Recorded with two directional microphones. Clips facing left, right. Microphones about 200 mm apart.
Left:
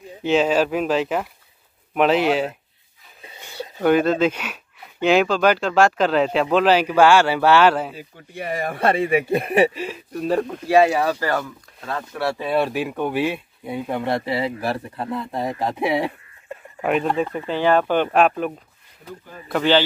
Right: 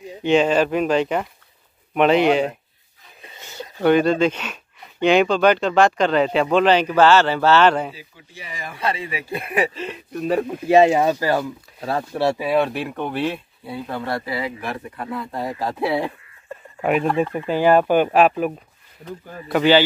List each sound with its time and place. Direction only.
0.2 s speech: 5° left (ahead or behind)
3.8 s speech: 5° left (ahead or behind)
7.9 s speech: 55° left (ahead or behind)
9.8 s speech: 5° left (ahead or behind)
10.7 s speech: 20° right (ahead or behind)
12.4 s speech: centre (ahead or behind)
13.7 s speech: 20° left (ahead or behind)
17.3 s speech: 10° right (ahead or behind)